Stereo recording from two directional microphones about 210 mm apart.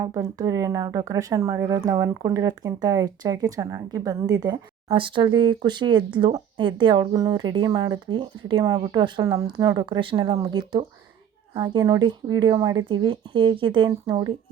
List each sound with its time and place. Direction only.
0.0 s speech: 15° right (ahead or behind)